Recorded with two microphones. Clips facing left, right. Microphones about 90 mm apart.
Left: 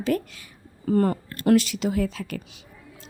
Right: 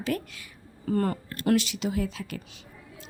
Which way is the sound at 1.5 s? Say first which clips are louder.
Left 5 dB; 45° left (ahead or behind).